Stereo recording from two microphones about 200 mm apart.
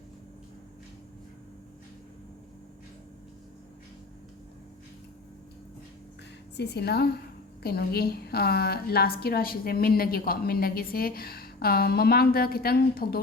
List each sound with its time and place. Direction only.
6.6 s a woman's voice: 55° left (ahead or behind)